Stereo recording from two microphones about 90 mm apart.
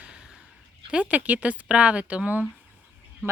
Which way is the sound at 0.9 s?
15° right (ahead or behind).